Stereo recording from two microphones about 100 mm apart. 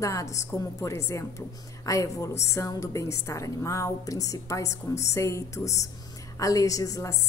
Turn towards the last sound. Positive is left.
turn(degrees=30)  # may be behind; listen again after turning